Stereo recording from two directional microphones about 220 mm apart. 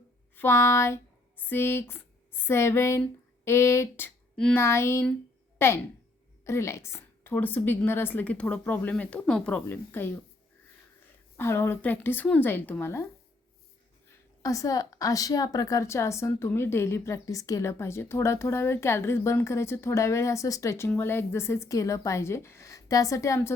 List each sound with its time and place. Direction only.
0.3 s a woman's voice: 10° left (ahead or behind)
11.3 s a woman's voice: 10° left (ahead or behind)
14.4 s a woman's voice: 15° left (ahead or behind)